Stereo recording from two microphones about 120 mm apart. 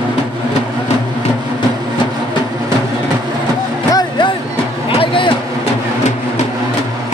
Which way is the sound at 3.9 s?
40° left (ahead or behind).